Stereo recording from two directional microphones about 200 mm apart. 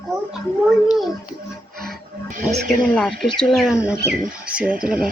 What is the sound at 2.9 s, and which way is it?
Speech, 5° left (ahead or behind).